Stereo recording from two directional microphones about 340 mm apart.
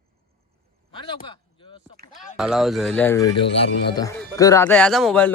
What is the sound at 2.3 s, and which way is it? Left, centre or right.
Speech, centre.